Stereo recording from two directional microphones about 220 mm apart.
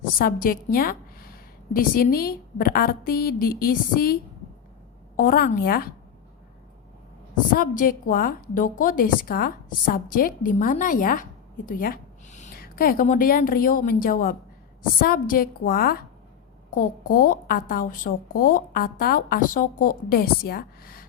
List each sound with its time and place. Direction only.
0.0 s a woman's voice: 40° left (ahead or behind)
7.5 s a woman's voice: 40° left (ahead or behind)